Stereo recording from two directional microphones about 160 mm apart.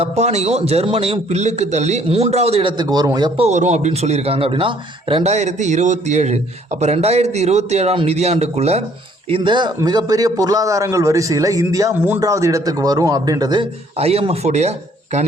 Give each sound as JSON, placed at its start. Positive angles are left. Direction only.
{"t": 0.0, "sound": "a man's voice", "side_deg": -45}
{"t": 3.4, "sound": "a man's voice", "side_deg": -45}
{"t": 14.0, "sound": "a man's voice", "side_deg": -40}